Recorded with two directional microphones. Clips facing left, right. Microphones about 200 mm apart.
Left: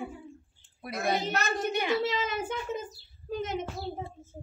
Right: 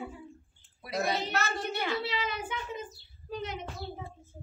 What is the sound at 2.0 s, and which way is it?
A child's voice, 45° left (ahead or behind).